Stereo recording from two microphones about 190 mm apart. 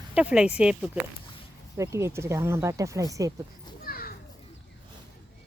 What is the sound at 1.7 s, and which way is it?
Speech, 15° right (ahead or behind).